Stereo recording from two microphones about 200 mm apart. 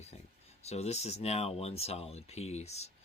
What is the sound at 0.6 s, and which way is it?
Speech, 30° left (ahead or behind).